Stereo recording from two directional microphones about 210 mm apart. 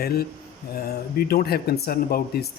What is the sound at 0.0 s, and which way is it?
Speech, 50° left (ahead or behind).